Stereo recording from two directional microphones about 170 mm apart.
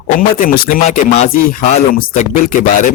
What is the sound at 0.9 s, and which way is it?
Speech, 40° left (ahead or behind).